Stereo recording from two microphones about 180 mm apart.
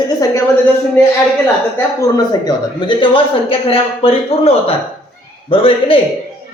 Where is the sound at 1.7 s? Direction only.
20° left (ahead or behind).